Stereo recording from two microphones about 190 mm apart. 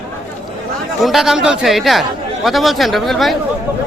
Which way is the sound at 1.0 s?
Centre (ahead or behind).